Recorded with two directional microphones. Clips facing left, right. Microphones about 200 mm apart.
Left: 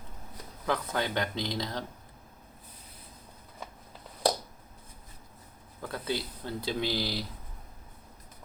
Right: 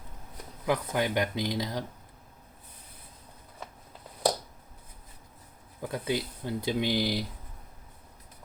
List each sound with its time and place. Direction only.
0.6 s speech: 15° right (ahead or behind)
5.8 s speech: 15° right (ahead or behind)